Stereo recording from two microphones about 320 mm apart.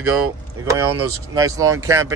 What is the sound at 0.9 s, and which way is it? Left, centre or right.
Speech, right.